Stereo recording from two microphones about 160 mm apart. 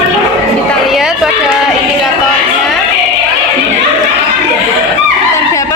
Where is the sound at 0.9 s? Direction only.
Centre (ahead or behind).